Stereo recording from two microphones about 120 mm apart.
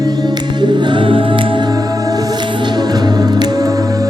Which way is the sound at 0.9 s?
45° right (ahead or behind).